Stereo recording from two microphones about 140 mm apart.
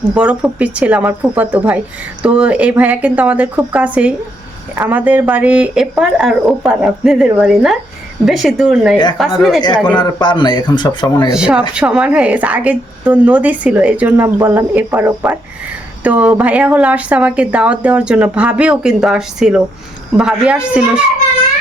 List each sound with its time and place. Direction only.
0.0 s a woman's voice: 10° right (ahead or behind)
9.6 s speech: 30° left (ahead or behind)
11.3 s a woman's voice: 5° right (ahead or behind)